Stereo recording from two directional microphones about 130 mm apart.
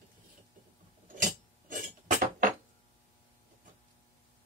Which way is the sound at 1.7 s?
90° right.